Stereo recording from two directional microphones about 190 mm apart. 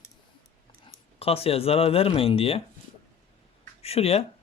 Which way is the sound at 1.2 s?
30° left (ahead or behind).